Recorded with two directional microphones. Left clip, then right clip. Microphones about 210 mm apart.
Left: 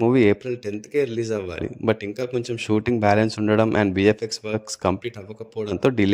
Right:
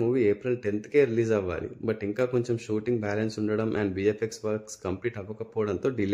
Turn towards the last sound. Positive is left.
turn(degrees=40)  # may be behind; listen again after turning